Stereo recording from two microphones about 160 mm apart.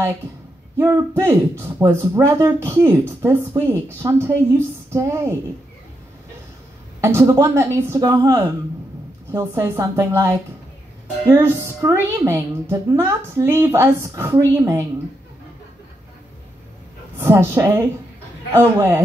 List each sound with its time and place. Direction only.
0.7 s speech: 15° right (ahead or behind)
7.0 s speech: 15° right (ahead or behind)
17.2 s speech: 15° right (ahead or behind)